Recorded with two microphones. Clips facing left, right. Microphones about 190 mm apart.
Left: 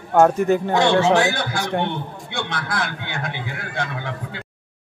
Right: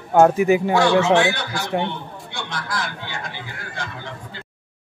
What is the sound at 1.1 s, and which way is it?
A man's voice, 45° left (ahead or behind).